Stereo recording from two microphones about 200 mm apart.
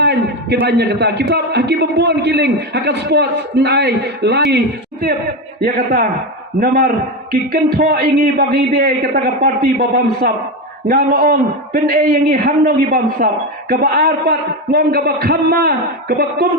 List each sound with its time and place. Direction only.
0.0 s a man's voice: 55° right (ahead or behind)